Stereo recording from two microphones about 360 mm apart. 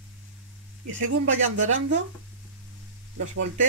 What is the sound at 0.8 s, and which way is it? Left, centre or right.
Speech, right.